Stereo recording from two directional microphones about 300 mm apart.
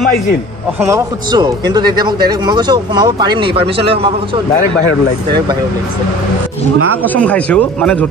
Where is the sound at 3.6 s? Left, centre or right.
Right.